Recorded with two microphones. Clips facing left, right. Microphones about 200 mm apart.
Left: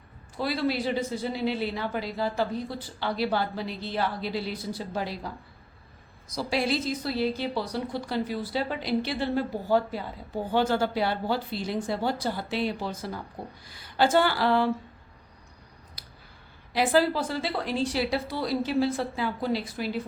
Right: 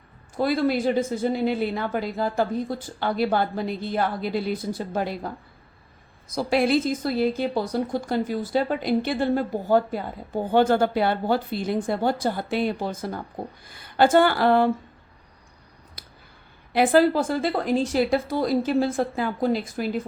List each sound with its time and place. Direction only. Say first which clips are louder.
0.3 s a woman's voice: right 5 dB; 50° right (ahead or behind)
6.3 s a woman's voice: right 6 dB; 55° right (ahead or behind)
16.0 s a sound: right 6 dB; 50° right (ahead or behind)
16.7 s a woman's voice: right 5 dB; 55° right (ahead or behind)